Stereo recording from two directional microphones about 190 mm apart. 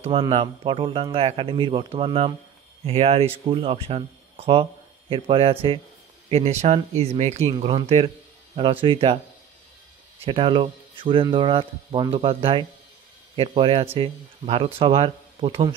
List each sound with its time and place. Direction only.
0.0 s speech: 30° right (ahead or behind)
10.2 s speech: 30° right (ahead or behind)